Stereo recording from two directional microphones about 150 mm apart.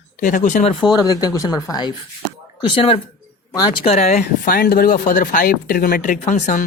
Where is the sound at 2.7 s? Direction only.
35° left (ahead or behind).